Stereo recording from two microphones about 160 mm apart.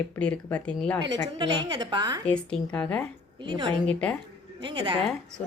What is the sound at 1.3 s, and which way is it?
Speech, 25° right (ahead or behind).